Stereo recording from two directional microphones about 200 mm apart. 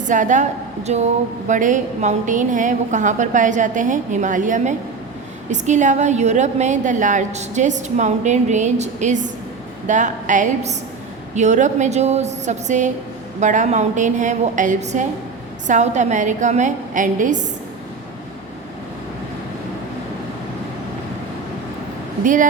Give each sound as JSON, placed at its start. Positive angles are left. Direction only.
{"t": 0.0, "sound": "a woman's voice", "side_deg": -40}
{"t": 22.2, "sound": "speech", "side_deg": -40}